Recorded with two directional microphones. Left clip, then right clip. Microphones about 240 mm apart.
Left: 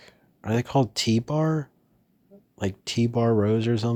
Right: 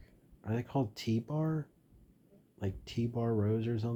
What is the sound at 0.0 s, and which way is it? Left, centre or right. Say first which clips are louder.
Speech: left 12 dB; left.